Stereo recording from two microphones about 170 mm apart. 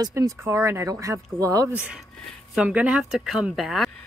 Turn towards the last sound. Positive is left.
turn(degrees=0)  # may be behind; listen again after turning